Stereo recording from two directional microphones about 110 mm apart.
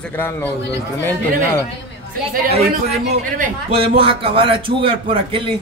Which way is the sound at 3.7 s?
60° right (ahead or behind).